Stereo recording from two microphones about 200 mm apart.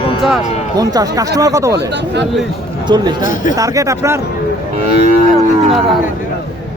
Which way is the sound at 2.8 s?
20° right (ahead or behind).